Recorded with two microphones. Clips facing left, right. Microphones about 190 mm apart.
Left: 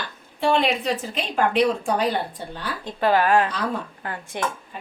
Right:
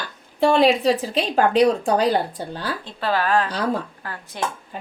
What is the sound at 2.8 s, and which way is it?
Speech, 15° left (ahead or behind).